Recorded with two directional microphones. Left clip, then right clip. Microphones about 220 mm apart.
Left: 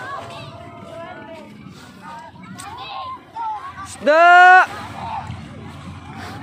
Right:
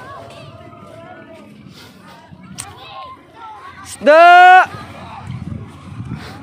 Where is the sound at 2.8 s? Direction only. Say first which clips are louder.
Left 7 dB; 50° left (ahead or behind).